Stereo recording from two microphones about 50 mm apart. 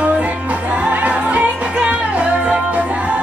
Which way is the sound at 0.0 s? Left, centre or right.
Right.